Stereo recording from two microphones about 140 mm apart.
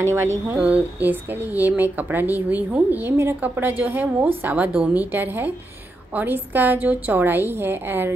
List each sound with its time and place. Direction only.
0.0 s speech: 20° right (ahead or behind)